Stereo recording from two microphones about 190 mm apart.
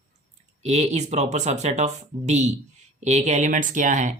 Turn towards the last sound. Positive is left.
turn(degrees=-40)  # may be behind; listen again after turning